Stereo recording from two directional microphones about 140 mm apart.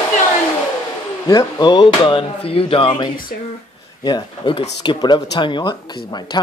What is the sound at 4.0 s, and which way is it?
Speech, 30° left (ahead or behind).